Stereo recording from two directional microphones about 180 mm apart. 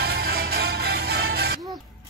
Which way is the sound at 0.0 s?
60° right (ahead or behind).